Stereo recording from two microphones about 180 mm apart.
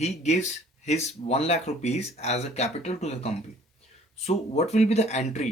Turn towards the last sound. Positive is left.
turn(degrees=40)  # may be behind; listen again after turning